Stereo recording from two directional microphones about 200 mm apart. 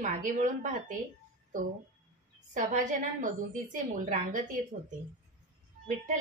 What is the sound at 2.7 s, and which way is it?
A woman's voice, 40° right (ahead or behind).